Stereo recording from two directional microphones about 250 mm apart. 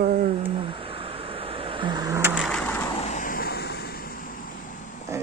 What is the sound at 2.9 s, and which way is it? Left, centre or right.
Vehicle, left.